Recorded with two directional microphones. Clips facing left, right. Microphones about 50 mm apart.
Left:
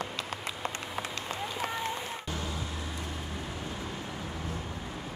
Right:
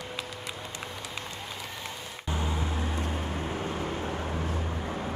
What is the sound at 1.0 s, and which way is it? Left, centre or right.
Run, left.